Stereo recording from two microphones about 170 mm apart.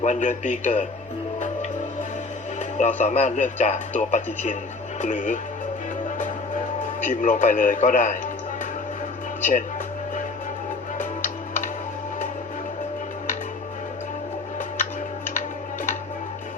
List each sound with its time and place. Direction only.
0.0 s speech: 45° left (ahead or behind)
2.6 s speech: 45° left (ahead or behind)
7.0 s speech: 50° left (ahead or behind)
9.4 s speech: 50° left (ahead or behind)
10.9 s music: 50° left (ahead or behind)